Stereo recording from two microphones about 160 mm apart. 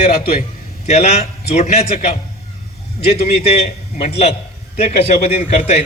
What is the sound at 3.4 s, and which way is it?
A man's voice, 40° left (ahead or behind).